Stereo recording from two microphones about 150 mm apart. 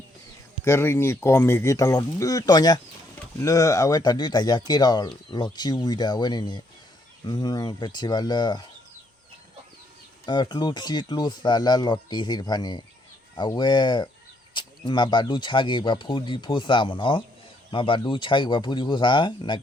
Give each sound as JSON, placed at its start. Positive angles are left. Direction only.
{"t": 0.6, "sound": "speech", "side_deg": 20}
{"t": 10.2, "sound": "speech", "side_deg": 30}